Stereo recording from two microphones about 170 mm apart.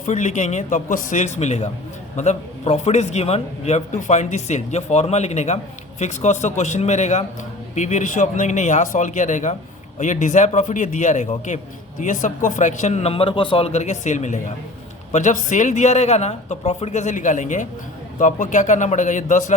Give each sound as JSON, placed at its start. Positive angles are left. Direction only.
{"t": 0.0, "sound": "a man's voice", "side_deg": 45}